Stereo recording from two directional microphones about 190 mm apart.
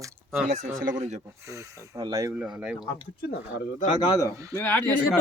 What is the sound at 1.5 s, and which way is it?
Speech, 20° right (ahead or behind).